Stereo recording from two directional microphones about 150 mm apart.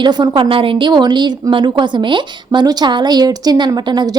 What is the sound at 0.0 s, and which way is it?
A woman's voice, 30° right (ahead or behind).